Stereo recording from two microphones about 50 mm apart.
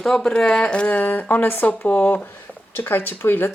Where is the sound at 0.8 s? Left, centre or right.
Left.